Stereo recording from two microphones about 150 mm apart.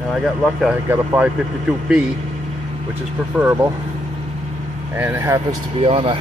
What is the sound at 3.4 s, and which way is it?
Speech, 10° right (ahead or behind).